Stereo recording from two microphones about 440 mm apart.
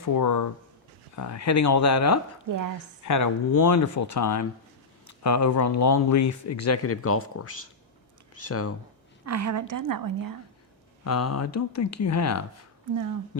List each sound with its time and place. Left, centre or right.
0.0 s speech: left
2.5 s a woman's voice: right
3.0 s speech: left
9.2 s a woman's voice: right
11.0 s speech: left